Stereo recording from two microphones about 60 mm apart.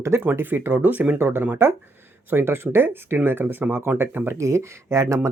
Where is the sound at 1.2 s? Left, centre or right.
Right.